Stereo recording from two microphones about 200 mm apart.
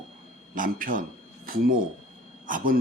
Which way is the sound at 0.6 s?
45° right (ahead or behind).